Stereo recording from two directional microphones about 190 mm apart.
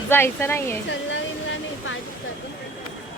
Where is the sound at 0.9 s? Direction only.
80° left.